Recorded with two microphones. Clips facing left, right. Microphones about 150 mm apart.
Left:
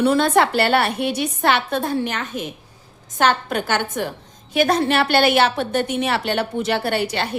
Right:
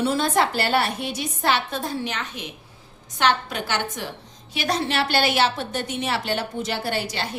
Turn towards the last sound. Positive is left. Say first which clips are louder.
# left 5 dB
turn(degrees=60)  # may be behind; listen again after turning